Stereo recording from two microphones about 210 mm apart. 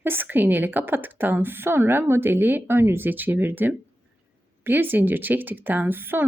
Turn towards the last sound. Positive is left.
turn(degrees=-10)  # may be behind; listen again after turning